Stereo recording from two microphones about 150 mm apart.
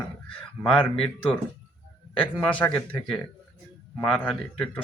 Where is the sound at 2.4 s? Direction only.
10° left (ahead or behind).